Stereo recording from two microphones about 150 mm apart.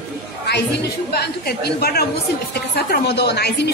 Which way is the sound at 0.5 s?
90° left.